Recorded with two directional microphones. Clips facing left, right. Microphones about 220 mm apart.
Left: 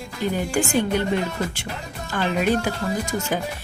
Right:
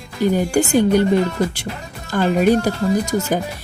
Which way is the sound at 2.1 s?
40° right (ahead or behind).